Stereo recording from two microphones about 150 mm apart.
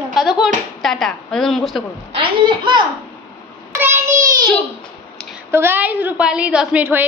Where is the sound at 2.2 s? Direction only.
35° right (ahead or behind).